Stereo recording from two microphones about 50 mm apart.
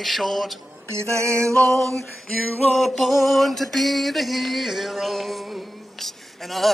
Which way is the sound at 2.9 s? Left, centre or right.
Centre.